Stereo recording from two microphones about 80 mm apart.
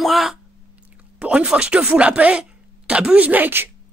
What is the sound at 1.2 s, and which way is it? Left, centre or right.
Speech, centre.